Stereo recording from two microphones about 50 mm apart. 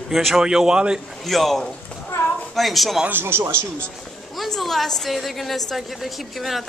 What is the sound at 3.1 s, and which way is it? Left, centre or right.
Speech, right.